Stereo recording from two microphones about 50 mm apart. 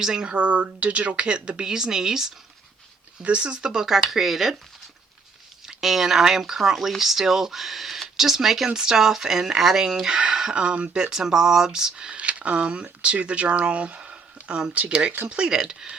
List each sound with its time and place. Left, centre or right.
0.0 s speech: centre
3.2 s speech: right; by 4.5 s centre
5.6 s speech: centre
12.1 s speech: right